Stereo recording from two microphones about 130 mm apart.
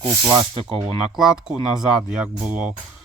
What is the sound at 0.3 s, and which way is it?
Speech, 40° right (ahead or behind).